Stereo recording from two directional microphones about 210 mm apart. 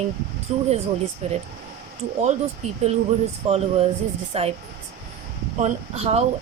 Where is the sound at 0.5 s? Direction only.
30° right (ahead or behind).